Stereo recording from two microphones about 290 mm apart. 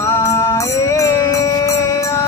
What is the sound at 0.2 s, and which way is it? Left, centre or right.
Music, centre.